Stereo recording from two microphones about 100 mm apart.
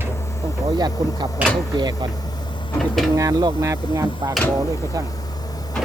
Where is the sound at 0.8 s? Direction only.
45° right (ahead or behind).